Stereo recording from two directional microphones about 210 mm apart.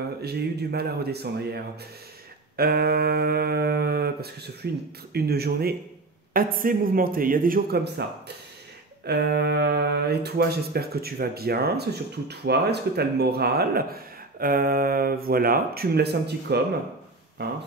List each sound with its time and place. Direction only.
0.2 s speech: 50° right (ahead or behind)
9.0 s speech: 50° right (ahead or behind)